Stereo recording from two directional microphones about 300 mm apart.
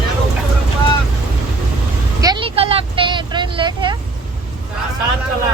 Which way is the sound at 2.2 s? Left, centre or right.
Centre.